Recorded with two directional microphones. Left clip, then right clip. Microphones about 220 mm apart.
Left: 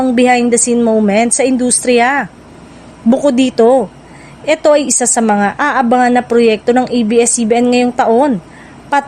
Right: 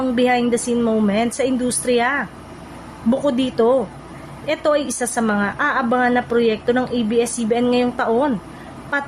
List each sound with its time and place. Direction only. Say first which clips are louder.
0.0 s a woman's voice: left 7 dB; 35° left (ahead or behind)